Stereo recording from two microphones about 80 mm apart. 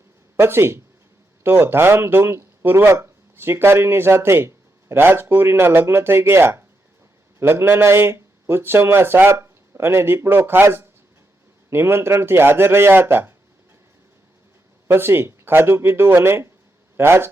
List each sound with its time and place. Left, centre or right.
0.3 s a man's voice: right
14.8 s a man's voice: right